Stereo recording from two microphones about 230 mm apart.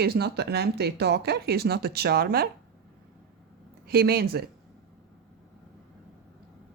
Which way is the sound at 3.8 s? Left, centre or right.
Right.